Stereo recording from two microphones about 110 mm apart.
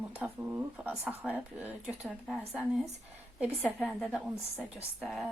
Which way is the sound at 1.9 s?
Centre (ahead or behind).